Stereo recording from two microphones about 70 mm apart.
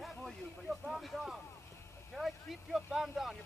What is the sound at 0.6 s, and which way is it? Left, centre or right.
Speech, centre.